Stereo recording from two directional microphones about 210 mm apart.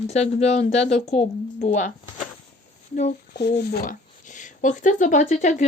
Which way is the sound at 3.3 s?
55° left (ahead or behind).